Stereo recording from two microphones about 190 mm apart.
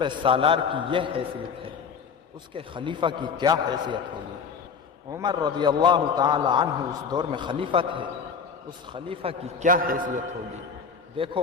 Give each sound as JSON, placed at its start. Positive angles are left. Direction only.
{"t": 0.0, "sound": "a man's voice", "side_deg": -25}
{"t": 2.5, "sound": "a man's voice", "side_deg": -25}
{"t": 5.1, "sound": "a man's voice", "side_deg": -20}
{"t": 11.2, "sound": "a man's voice", "side_deg": -30}